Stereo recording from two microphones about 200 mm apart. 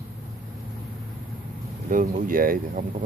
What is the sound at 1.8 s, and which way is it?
Speech, 40° right (ahead or behind).